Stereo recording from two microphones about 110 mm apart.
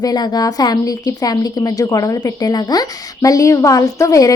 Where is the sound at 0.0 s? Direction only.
40° left (ahead or behind).